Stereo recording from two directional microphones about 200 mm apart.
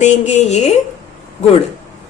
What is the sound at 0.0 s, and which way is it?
Speech, 35° left (ahead or behind).